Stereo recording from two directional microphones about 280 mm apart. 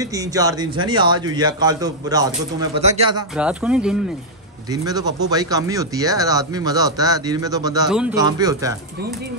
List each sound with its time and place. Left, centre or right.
0.0 s speech: centre
3.3 s speech: centre
4.6 s speech: centre